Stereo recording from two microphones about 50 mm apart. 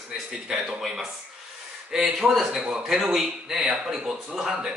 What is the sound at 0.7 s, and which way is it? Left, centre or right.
Mantra, centre.